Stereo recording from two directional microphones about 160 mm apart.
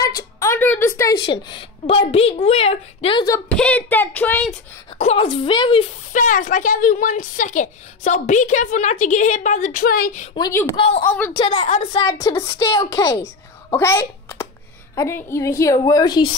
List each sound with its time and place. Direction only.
0.0 s a sound: 20° left (ahead or behind)
1.2 s a woman's voice: 30° left (ahead or behind)
3.4 s speech: 10° left (ahead or behind)
4.9 s a woman's voice: 40° left (ahead or behind)
6.1 s a woman's voice: 55° left (ahead or behind)
10.8 s a woman's voice: 40° left (ahead or behind)
12.0 s a woman's voice: 20° left (ahead or behind)